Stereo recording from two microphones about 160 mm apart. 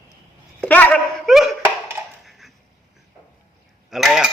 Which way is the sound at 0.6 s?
10° left (ahead or behind).